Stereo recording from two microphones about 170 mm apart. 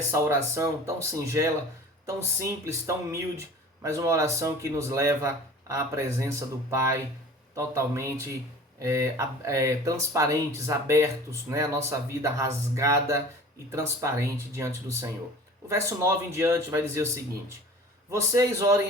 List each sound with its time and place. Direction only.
0.1 s speech: 15° right (ahead or behind)
18.1 s speech: 20° right (ahead or behind)